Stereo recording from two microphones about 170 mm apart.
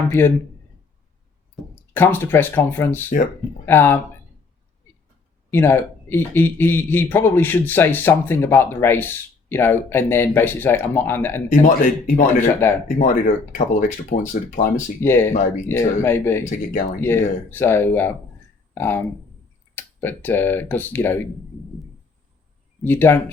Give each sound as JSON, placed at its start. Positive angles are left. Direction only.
{"t": 0.1, "sound": "a man's voice", "side_deg": 15}
{"t": 1.9, "sound": "a man's voice", "side_deg": 10}
{"t": 5.5, "sound": "a man's voice", "side_deg": 15}
{"t": 11.4, "sound": "speech", "side_deg": 45}
{"t": 12.6, "sound": "a man's voice", "side_deg": 15}
{"t": 13.0, "sound": "speech", "side_deg": 50}
{"t": 15.0, "sound": "a man's voice", "side_deg": 15}
{"t": 22.8, "sound": "a man's voice", "side_deg": 10}